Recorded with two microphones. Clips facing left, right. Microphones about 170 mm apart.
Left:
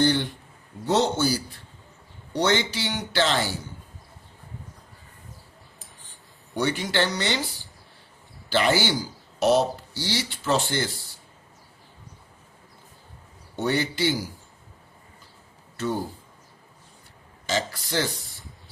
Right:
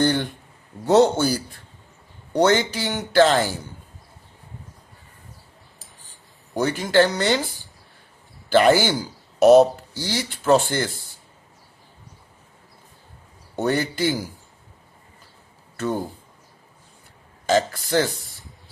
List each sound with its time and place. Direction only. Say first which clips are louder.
0.0 s a sound: right 1 dB; 50° right (ahead or behind)
0.9 s speech: right 6 dB; 55° right (ahead or behind)
2.4 s speech: right 5 dB; 50° right (ahead or behind)
5.8 s a sound: even; centre (ahead or behind)
6.5 s speech: right 5 dB; 45° right (ahead or behind)
8.4 s speech: right 6 dB; 50° right (ahead or behind)
13.6 s speech: right 3 dB; 50° right (ahead or behind)
17.4 s speech: right 8 dB; 50° right (ahead or behind)
18.3 s spray: even; centre (ahead or behind)